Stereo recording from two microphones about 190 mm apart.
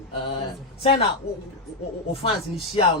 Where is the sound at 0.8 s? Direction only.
25° left (ahead or behind).